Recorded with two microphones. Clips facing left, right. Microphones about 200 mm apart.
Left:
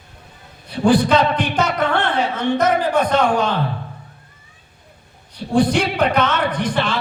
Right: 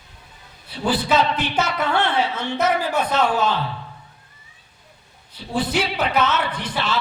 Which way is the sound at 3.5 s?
50° left (ahead or behind).